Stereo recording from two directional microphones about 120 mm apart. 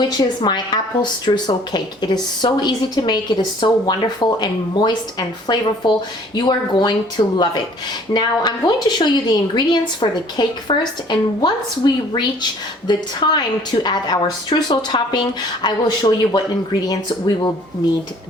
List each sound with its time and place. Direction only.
0.0 s a woman's voice: 35° left (ahead or behind)
8.1 s a woman's voice: 35° left (ahead or behind)